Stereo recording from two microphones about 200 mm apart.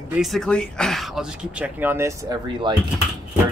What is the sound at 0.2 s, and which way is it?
Speech, centre (ahead or behind).